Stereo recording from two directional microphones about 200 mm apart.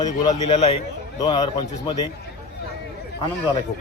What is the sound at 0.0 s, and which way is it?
A man's voice, 20° left (ahead or behind).